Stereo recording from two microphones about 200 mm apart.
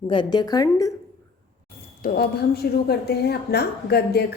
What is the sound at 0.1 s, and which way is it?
Speech, 20° left (ahead or behind).